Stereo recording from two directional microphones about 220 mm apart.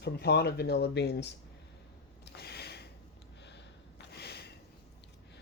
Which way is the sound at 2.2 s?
50° left (ahead or behind).